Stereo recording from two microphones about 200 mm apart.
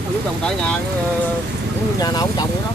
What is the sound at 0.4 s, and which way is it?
Speech, 5° left (ahead or behind).